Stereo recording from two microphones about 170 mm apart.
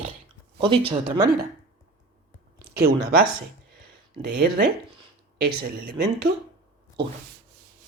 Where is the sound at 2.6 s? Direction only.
65° right (ahead or behind).